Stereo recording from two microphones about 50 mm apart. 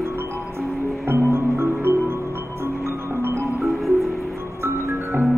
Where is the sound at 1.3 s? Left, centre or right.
Right.